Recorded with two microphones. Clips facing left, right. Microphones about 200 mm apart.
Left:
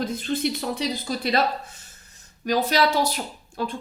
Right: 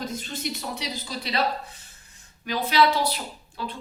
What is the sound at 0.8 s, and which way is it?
Speech, 50° left (ahead or behind).